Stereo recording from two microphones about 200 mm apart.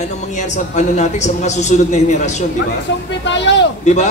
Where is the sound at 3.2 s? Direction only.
65° left (ahead or behind).